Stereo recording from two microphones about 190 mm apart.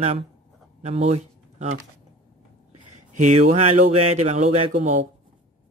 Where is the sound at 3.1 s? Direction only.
40° right (ahead or behind).